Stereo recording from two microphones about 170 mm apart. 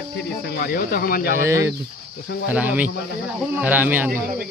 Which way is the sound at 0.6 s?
55° left (ahead or behind).